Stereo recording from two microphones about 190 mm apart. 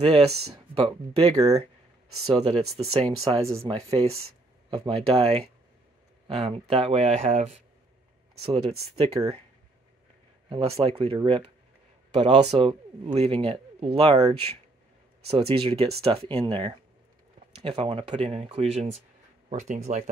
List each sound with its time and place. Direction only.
0.0 s speech: 30° right (ahead or behind)
10.5 s speech: 30° right (ahead or behind)